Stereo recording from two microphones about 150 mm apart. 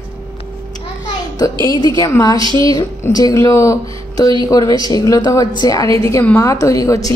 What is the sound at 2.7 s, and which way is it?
A woman's voice, 25° left (ahead or behind).